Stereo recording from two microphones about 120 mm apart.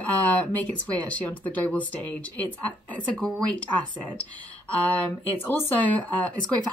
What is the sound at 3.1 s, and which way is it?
Speech, 5° left (ahead or behind).